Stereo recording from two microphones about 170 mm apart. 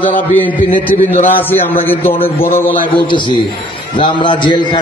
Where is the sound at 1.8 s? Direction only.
10° left (ahead or behind).